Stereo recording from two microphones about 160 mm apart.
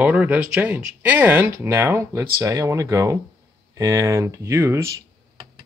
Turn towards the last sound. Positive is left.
turn(degrees=-20)  # may be behind; listen again after turning